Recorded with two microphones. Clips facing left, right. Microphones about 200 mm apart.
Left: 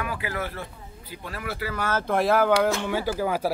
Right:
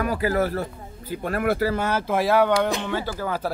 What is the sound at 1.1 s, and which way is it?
Speech, 55° right (ahead or behind).